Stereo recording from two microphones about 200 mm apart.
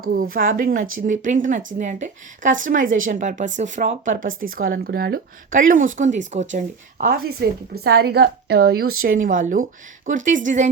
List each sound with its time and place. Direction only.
0.0 s a woman's voice: 45° right (ahead or behind)